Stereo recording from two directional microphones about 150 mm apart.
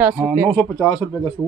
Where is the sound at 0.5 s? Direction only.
20° left (ahead or behind).